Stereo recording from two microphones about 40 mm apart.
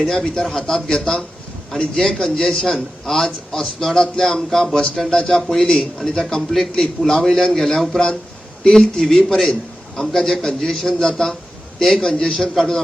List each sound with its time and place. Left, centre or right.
0.0 s a man's voice: centre
6.5 s a man's voice: centre